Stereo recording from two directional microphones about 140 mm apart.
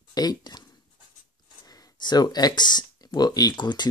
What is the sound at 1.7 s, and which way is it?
Speech, 30° left (ahead or behind).